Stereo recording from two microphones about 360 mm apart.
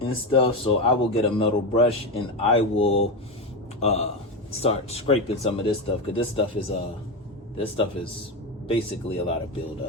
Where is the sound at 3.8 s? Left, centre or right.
Centre.